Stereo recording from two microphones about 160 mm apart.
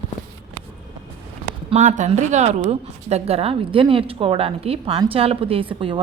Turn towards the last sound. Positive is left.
turn(degrees=-35)  # may be behind; listen again after turning